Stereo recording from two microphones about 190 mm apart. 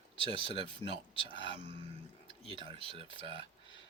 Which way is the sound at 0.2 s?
30° right (ahead or behind).